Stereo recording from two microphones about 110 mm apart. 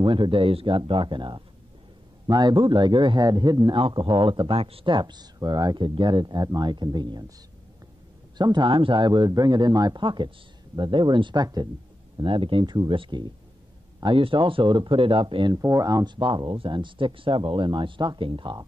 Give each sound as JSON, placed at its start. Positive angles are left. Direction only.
{"t": 0.0, "sound": "a man's voice", "side_deg": -50}
{"t": 8.4, "sound": "a man's voice", "side_deg": -40}
{"t": 12.2, "sound": "speech", "side_deg": -50}
{"t": 15.5, "sound": "speech", "side_deg": -30}